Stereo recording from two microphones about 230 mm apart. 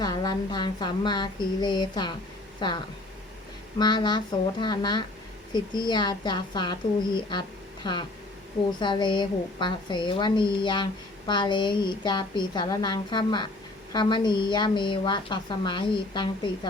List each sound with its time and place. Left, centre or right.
0.0 s a woman's voice: centre
7.9 s a woman's voice: centre